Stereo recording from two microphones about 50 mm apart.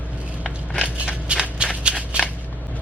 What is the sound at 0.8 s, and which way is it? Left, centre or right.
Shuffling cards, right.